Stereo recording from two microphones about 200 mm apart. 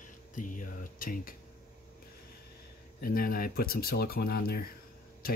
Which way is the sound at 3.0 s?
45° left (ahead or behind).